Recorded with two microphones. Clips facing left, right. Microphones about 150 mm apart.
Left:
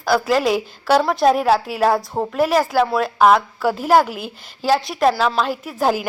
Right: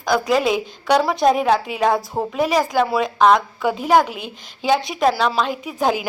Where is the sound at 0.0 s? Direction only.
Centre (ahead or behind).